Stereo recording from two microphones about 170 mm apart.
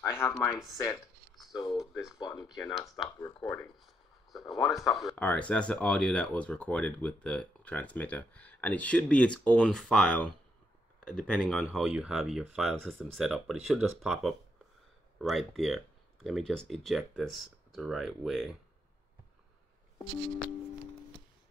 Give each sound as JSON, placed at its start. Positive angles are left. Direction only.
{"t": 0.0, "sound": "speech", "side_deg": 15}
{"t": 0.7, "sound": "a sound", "side_deg": 20}
{"t": 1.5, "sound": "speech", "side_deg": 25}
{"t": 1.8, "sound": "speech", "side_deg": -5}
{"t": 2.1, "sound": "speech", "side_deg": 25}
{"t": 3.8, "sound": "speech", "side_deg": 0}